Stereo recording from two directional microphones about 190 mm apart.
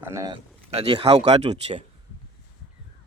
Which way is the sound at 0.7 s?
30° right (ahead or behind).